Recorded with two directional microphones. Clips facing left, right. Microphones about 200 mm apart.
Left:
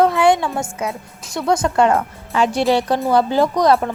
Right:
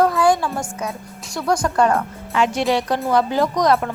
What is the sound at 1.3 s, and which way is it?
Speech, 25° left (ahead or behind).